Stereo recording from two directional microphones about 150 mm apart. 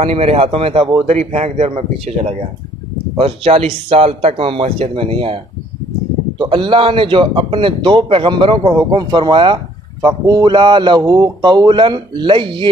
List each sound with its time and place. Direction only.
0.0 s a man's voice: 40° right (ahead or behind)